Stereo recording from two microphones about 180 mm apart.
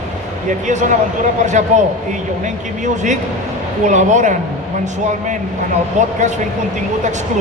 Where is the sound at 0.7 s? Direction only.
40° right (ahead or behind).